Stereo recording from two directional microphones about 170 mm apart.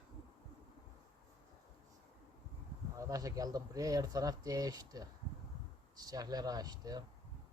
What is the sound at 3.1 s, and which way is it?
Speech, 20° right (ahead or behind).